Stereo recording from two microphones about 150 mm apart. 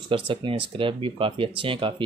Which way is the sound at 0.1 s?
35° right (ahead or behind).